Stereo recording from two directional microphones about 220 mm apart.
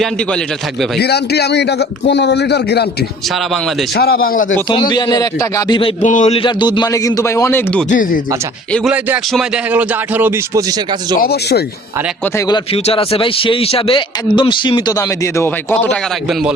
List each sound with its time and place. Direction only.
0.9 s a man's voice: 45° left (ahead or behind)
3.9 s a man's voice: 45° left (ahead or behind)
4.7 s a man's voice: 20° left (ahead or behind)
6.0 s a man's voice: 35° left (ahead or behind); by 7.9 s 10° left (ahead or behind)
7.9 s speech: 40° left (ahead or behind)
8.7 s a man's voice: 5° right (ahead or behind)
11.2 s a man's voice: 45° left (ahead or behind)
12.5 s a man's voice: 25° left (ahead or behind); by 16.0 s 10° left (ahead or behind)